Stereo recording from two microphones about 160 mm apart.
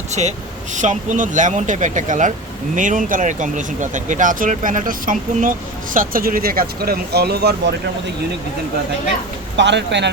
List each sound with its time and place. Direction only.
0.1 s speech: 45° right (ahead or behind); by 7.5 s 85° right
9.6 s speech: 90° right